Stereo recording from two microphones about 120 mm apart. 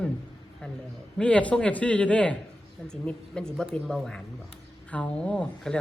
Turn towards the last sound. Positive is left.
turn(degrees=5)  # may be behind; listen again after turning